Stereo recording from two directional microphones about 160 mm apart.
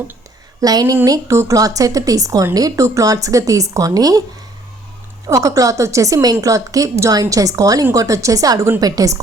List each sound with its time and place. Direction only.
0.6 s a woman's voice: 25° right (ahead or behind)
5.3 s a woman's voice: 20° right (ahead or behind)